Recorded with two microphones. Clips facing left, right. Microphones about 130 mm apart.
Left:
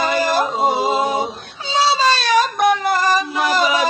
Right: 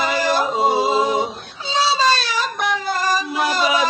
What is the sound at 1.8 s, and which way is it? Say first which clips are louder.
Whimper: left 2 dB; 65° left (ahead or behind).